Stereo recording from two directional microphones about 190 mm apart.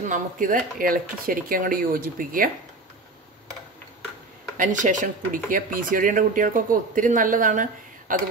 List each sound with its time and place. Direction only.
0.1 s speech: 45° right (ahead or behind)
4.6 s speech: 40° right (ahead or behind)